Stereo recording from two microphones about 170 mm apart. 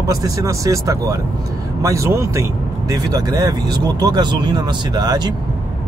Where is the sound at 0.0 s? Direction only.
20° right (ahead or behind).